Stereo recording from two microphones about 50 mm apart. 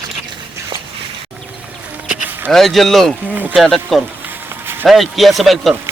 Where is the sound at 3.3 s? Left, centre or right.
Right.